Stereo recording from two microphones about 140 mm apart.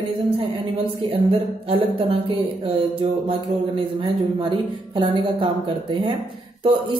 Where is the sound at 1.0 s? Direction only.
40° right (ahead or behind).